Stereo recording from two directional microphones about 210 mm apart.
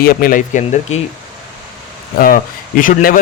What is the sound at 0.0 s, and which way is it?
Speech, 45° left (ahead or behind).